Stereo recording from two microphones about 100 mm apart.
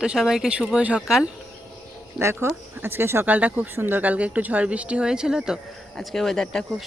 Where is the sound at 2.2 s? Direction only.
25° right (ahead or behind); by 5.6 s 5° right (ahead or behind).